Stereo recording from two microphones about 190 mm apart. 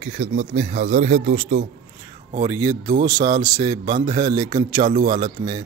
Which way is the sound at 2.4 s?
15° right (ahead or behind).